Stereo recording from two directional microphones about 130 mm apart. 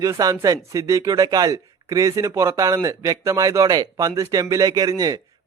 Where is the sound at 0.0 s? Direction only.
25° right (ahead or behind).